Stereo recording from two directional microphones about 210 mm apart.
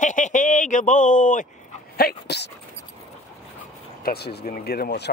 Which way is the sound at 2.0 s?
50° left (ahead or behind).